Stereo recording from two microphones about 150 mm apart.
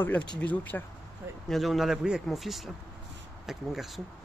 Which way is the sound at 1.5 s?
Centre (ahead or behind).